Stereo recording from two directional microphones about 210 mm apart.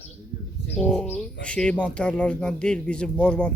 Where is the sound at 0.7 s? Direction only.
5° left (ahead or behind).